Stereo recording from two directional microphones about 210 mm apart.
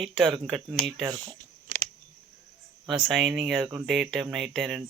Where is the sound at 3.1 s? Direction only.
Centre (ahead or behind).